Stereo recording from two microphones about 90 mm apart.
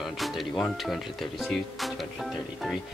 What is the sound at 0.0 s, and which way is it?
Speech, centre (ahead or behind).